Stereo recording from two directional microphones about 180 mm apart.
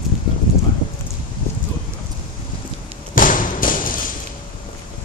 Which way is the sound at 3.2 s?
50° left (ahead or behind).